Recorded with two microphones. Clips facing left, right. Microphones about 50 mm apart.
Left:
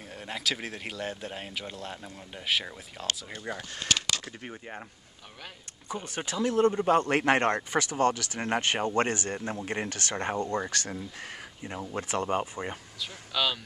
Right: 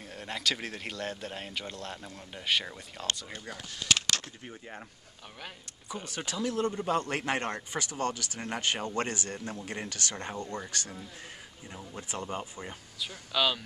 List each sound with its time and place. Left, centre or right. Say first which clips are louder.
0.1 s speech: even; centre
6.0 s speech: left 4 dB; left
12.4 s speech: left 7 dB; left
13.0 s speech: right 1 dB; centre